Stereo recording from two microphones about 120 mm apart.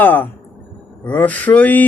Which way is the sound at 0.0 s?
15° left (ahead or behind).